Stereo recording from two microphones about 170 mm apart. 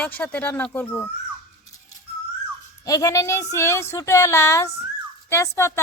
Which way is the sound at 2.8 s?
20° left (ahead or behind).